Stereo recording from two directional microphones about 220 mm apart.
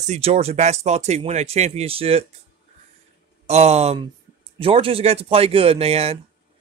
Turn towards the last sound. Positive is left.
turn(degrees=-25)  # may be behind; listen again after turning